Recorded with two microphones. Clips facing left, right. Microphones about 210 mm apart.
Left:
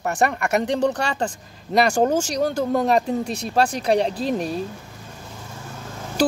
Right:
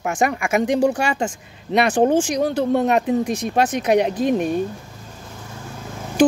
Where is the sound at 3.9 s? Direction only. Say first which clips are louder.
Right 5 dB; 30° left (ahead or behind).